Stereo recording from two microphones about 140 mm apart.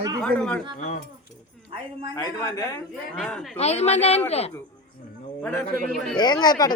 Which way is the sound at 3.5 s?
50° left (ahead or behind).